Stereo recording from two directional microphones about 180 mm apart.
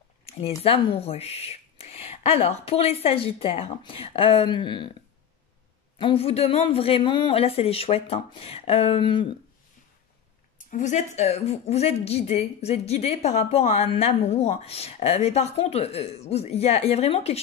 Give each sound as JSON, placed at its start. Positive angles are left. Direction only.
{"t": 0.2, "sound": "a sound", "side_deg": 35}
{"t": 0.7, "sound": "a woman's voice", "side_deg": 35}
{"t": 5.9, "sound": "a woman's voice", "side_deg": 30}
{"t": 10.7, "sound": "a woman's voice", "side_deg": 40}